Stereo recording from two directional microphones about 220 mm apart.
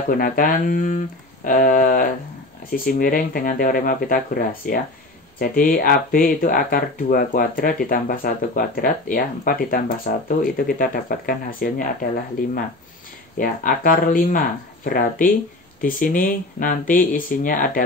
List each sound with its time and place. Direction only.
0.1 s speech: 40° left (ahead or behind)
13.4 s speech: 40° left (ahead or behind)